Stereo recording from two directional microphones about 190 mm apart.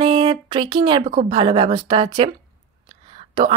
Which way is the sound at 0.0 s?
30° right (ahead or behind).